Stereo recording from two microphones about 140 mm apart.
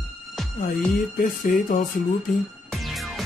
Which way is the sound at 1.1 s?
75° left (ahead or behind).